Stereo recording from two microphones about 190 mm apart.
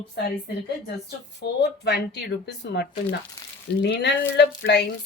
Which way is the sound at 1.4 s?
65° left (ahead or behind).